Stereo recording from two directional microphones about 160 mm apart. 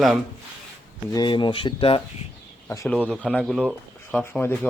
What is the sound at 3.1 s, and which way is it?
Speech, 5° left (ahead or behind).